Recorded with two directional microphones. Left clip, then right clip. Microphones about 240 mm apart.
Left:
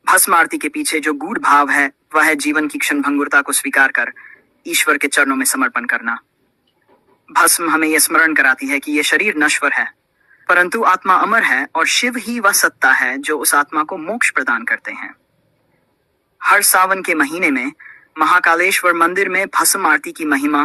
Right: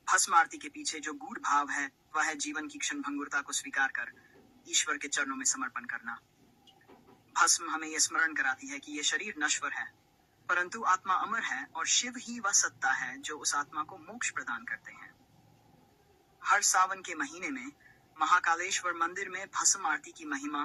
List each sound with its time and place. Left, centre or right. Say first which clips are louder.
0.1 s speech: left 14 dB; left
7.3 s speech: left 15 dB; left
16.5 s speech: left 15 dB; left